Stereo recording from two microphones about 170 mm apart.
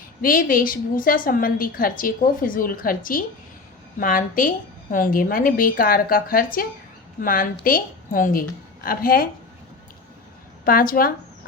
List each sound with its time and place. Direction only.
0.2 s a woman's voice: 55° left (ahead or behind)
10.7 s a woman's voice: 55° left (ahead or behind)